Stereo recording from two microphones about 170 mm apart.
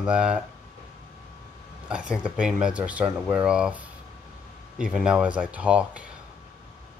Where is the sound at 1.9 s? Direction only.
5° right (ahead or behind).